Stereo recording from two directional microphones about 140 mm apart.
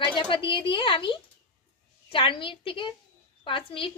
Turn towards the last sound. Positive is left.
turn(degrees=40)  # may be behind; listen again after turning